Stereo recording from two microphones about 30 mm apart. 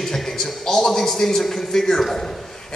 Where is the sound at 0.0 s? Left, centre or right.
Centre.